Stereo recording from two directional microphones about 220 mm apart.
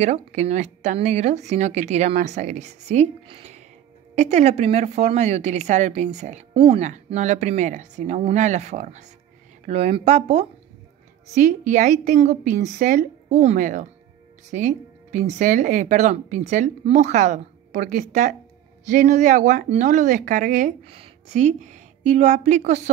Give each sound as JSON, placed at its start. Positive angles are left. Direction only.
{"t": 0.0, "sound": "a woman's voice", "side_deg": -30}